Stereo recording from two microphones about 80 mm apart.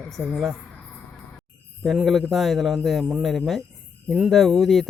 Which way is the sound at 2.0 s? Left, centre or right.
Centre.